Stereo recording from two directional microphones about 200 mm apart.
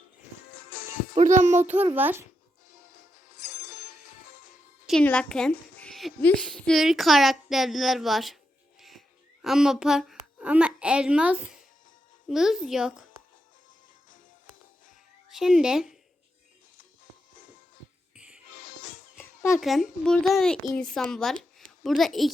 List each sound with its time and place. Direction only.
1.1 s music: 35° right (ahead or behind)
2.0 s a child's voice: 10° right (ahead or behind)
4.9 s a woman's voice: 5° left (ahead or behind)
15.3 s speech: centre (ahead or behind)
19.2 s a sound: 15° left (ahead or behind)
19.5 s a woman's voice: centre (ahead or behind)